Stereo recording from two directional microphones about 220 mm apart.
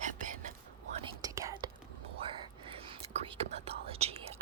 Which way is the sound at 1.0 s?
15° right (ahead or behind).